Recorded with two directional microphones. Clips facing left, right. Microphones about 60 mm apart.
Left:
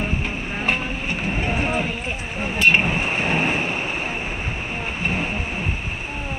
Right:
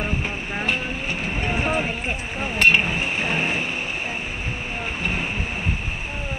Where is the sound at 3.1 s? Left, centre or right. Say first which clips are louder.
Left 2 dB; left.